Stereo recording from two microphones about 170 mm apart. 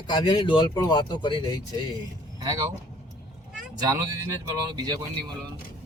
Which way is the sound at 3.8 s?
15° right (ahead or behind).